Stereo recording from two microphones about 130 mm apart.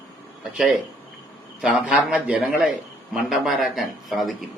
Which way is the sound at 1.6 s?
10° right (ahead or behind).